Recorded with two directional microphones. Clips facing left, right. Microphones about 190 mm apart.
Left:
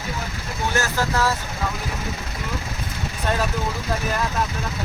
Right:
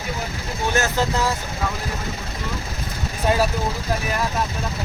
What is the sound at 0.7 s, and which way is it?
Speech, 20° right (ahead or behind).